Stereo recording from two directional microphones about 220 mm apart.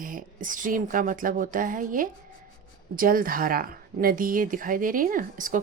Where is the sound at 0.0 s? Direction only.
40° right (ahead or behind).